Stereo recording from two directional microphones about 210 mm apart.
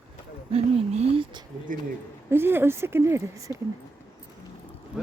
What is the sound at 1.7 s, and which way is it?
Speech, 40° right (ahead or behind).